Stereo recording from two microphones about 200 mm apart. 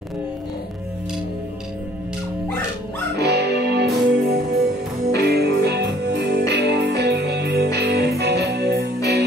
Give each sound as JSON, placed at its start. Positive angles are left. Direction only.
{"t": 3.2, "sound": "music", "side_deg": -55}